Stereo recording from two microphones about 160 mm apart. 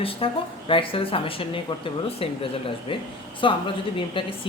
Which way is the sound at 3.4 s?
30° left (ahead or behind).